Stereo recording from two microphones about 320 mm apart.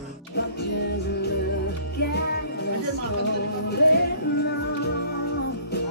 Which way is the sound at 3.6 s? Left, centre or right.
Left.